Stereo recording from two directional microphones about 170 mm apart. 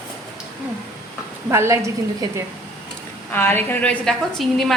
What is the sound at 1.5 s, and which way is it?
Speech, 15° right (ahead or behind).